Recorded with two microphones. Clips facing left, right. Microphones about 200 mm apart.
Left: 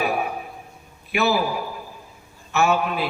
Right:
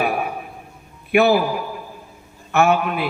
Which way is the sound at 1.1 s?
55° right (ahead or behind).